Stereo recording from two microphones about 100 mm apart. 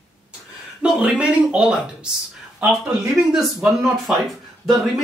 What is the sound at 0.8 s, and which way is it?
Speech, 10° right (ahead or behind).